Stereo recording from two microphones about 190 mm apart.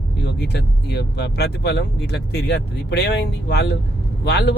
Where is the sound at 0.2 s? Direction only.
60° left (ahead or behind).